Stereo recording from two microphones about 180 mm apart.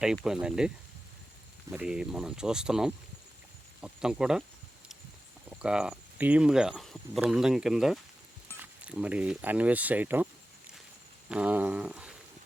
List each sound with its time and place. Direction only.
0.3 s speech: 5° right (ahead or behind)
1.7 s speech: 5° right (ahead or behind)
5.5 s speech: 5° right (ahead or behind)
11.3 s a sound: 5° right (ahead or behind)